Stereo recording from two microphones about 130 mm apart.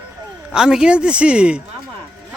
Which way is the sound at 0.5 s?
5° right (ahead or behind).